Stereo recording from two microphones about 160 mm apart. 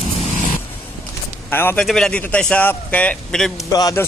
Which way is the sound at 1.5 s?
15° left (ahead or behind).